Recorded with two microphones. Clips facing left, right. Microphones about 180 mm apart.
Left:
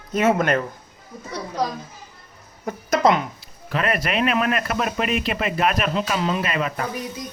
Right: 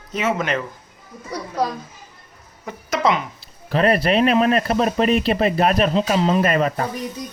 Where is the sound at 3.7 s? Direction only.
35° right (ahead or behind).